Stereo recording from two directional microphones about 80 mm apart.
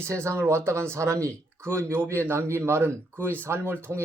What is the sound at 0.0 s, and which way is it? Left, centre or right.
Speech, right.